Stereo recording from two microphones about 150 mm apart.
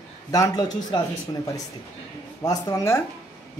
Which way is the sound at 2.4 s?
25° left (ahead or behind).